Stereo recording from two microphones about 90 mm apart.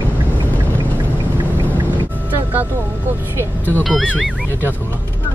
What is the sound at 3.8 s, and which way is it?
Music, centre (ahead or behind).